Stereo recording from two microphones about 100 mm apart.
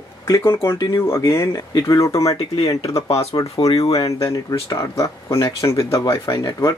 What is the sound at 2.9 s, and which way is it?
Speech, 90° left.